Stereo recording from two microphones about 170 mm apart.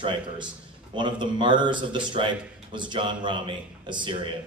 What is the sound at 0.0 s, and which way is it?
Speech, 30° right (ahead or behind).